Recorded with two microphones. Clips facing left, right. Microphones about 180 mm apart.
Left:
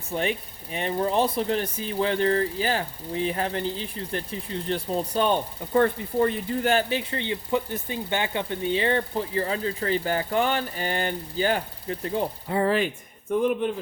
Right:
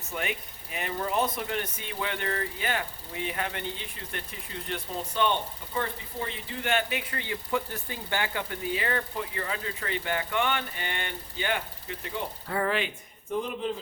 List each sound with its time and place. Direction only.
0.1 s speech: 30° left (ahead or behind)
12.5 s speech: 25° left (ahead or behind)
13.3 s speech: 55° left (ahead or behind)